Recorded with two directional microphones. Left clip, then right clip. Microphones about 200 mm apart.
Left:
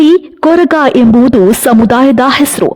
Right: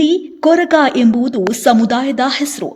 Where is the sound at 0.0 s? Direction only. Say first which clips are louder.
Left 6 dB; 45° left (ahead or behind).